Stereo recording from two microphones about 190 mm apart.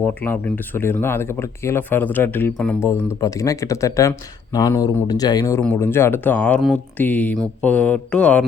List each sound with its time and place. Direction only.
0.0 s speech: 10° left (ahead or behind)